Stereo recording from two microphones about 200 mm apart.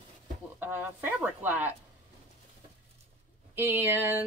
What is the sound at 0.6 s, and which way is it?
Speech, 10° right (ahead or behind).